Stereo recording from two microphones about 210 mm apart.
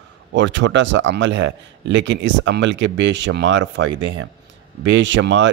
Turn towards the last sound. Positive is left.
turn(degrees=-60)  # may be behind; listen again after turning